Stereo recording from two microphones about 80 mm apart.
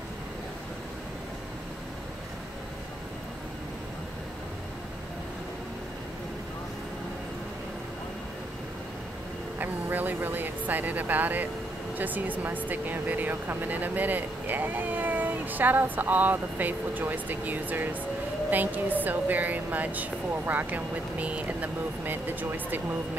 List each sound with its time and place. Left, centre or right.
9.6 s speech: right